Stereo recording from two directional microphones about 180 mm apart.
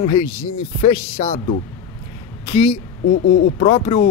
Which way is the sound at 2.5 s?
35° left (ahead or behind).